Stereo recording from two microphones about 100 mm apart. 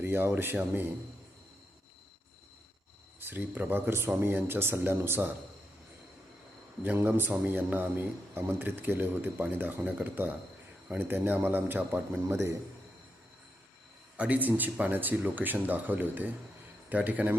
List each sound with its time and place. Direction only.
0.0 s speech: 25° right (ahead or behind)
3.2 s speech: 20° right (ahead or behind)
6.8 s speech: 20° right (ahead or behind)
14.2 s speech: 15° right (ahead or behind)